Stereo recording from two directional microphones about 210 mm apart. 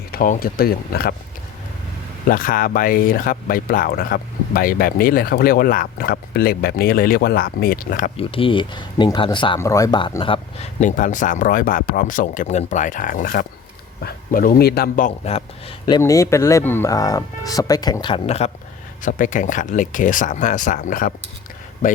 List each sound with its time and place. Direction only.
0.1 s speech: 45° left (ahead or behind)
2.2 s speech: 40° left (ahead or behind)
8.1 s speech: 25° left (ahead or behind)
15.9 s a man's voice: 15° left (ahead or behind); by 22.0 s 40° left (ahead or behind)